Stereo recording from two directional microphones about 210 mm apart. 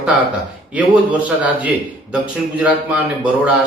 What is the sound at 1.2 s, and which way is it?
A man's voice, 5° right (ahead or behind).